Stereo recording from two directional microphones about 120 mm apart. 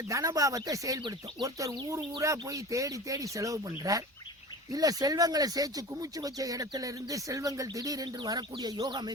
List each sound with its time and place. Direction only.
0.1 s speech: 25° right (ahead or behind)